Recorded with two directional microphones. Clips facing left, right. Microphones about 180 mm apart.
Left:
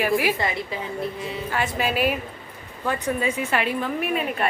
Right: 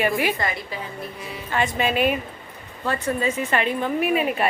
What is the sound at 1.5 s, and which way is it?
A woman's voice, 5° left (ahead or behind).